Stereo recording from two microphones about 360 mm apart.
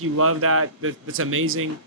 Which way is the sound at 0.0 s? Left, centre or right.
Right.